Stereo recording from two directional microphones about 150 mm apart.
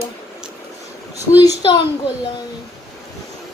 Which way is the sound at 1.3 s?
25° left (ahead or behind).